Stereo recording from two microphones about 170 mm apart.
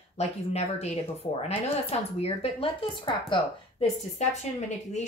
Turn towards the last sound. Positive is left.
turn(degrees=40)  # may be behind; listen again after turning